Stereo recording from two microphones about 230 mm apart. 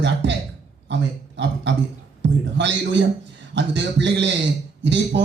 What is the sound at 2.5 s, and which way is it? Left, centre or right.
A man's voice, right.